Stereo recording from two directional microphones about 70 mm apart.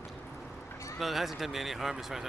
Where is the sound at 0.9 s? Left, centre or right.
Centre.